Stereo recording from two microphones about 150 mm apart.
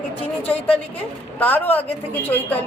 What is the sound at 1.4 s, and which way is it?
Speech, 10° left (ahead or behind).